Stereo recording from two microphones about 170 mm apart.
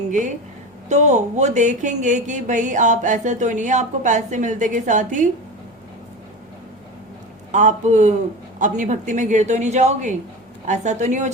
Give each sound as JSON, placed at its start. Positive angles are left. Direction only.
{"t": 0.9, "sound": "speech", "side_deg": -40}
{"t": 7.5, "sound": "speech", "side_deg": -45}